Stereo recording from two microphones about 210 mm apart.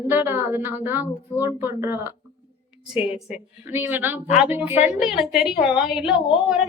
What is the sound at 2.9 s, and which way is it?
Speech, 25° left (ahead or behind).